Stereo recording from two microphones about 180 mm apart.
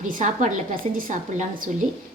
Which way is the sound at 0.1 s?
45° right (ahead or behind).